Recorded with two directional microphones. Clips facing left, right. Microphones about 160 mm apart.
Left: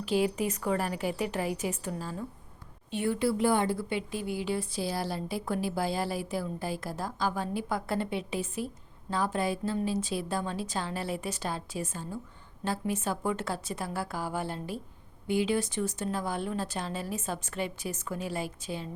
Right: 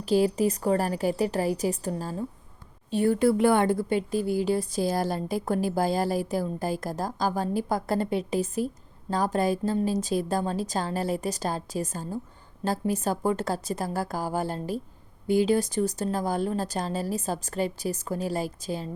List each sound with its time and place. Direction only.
0.0 s speech: 40° right (ahead or behind)